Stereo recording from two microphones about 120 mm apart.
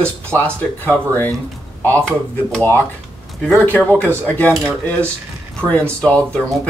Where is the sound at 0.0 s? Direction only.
10° left (ahead or behind).